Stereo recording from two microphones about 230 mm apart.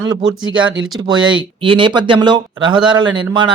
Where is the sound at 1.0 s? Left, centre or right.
Right.